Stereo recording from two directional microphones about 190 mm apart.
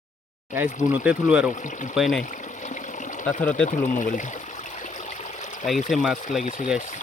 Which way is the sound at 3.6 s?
40° left (ahead or behind).